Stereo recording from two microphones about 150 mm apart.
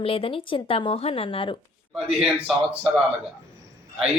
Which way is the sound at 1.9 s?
5° right (ahead or behind).